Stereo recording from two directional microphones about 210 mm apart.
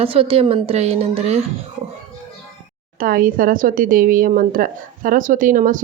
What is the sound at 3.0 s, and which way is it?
Speech, 40° right (ahead or behind).